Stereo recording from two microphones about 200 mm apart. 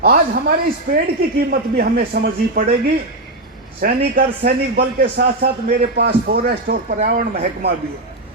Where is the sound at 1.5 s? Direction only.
45° right (ahead or behind).